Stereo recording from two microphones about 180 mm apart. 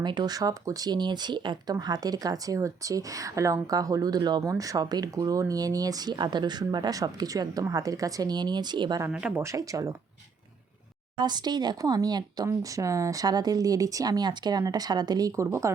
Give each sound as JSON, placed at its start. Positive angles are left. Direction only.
{"t": 0.0, "sound": "speech", "side_deg": -25}
{"t": 9.0, "sound": "speech", "side_deg": -10}
{"t": 11.2, "sound": "speech", "side_deg": -25}